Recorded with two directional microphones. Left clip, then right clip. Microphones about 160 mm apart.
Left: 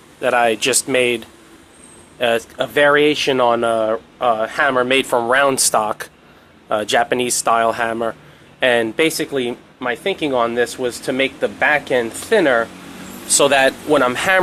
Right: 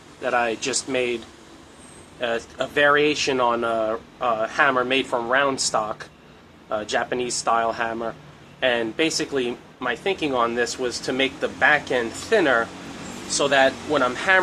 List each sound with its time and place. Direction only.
0.2 s speech: 55° left (ahead or behind)
2.2 s speech: 55° left (ahead or behind)